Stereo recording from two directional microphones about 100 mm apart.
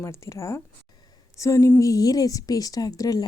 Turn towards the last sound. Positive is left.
turn(degrees=35)  # may be behind; listen again after turning